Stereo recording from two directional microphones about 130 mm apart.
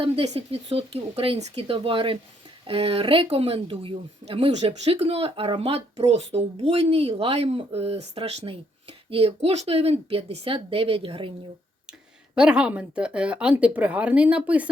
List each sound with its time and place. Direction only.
0.0 s speech: 45° right (ahead or behind)
12.3 s speech: 5° right (ahead or behind)